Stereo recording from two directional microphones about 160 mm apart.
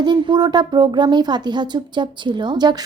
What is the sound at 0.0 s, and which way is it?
Speech, 25° right (ahead or behind).